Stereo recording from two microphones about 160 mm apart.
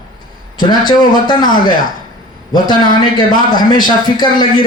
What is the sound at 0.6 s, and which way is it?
A man's voice, 25° left (ahead or behind).